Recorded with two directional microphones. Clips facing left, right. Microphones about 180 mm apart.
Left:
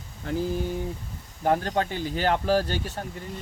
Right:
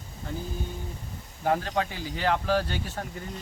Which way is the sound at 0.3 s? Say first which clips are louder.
Left 7 dB; 80° left.